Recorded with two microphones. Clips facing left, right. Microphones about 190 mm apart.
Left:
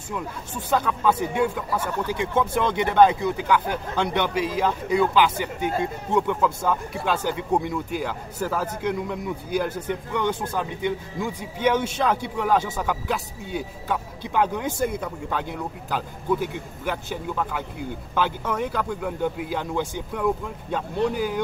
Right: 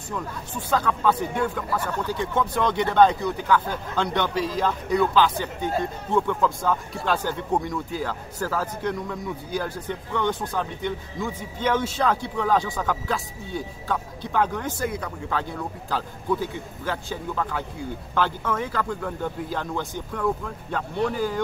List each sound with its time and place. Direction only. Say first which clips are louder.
0.7 s a man's voice: even; 10° left (ahead or behind)